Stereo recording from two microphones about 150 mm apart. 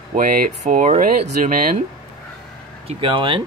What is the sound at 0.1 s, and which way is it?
Speech, 70° right (ahead or behind).